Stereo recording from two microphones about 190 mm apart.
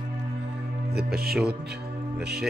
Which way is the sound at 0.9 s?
55° right (ahead or behind).